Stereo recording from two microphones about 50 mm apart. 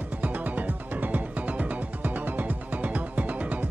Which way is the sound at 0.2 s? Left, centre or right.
Right.